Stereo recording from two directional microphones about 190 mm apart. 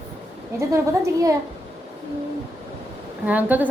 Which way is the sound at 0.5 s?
15° right (ahead or behind).